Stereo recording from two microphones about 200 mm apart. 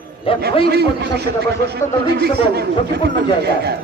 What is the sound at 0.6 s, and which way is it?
A man's voice, 55° right (ahead or behind).